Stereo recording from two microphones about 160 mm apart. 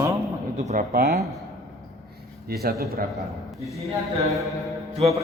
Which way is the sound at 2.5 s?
75° right (ahead or behind).